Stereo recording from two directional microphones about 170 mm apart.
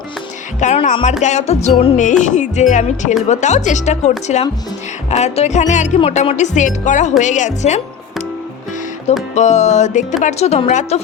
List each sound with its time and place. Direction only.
0.6 s speech: 45° left (ahead or behind)
1.2 s music: 40° left (ahead or behind)
2.2 s speech: 45° left (ahead or behind)
5.1 s speech: 40° left (ahead or behind)
9.3 s speech: 45° left (ahead or behind)
10.2 s music: 40° left (ahead or behind)